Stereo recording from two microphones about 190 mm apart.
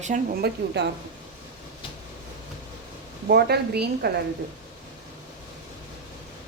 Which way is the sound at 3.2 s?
55° right (ahead or behind).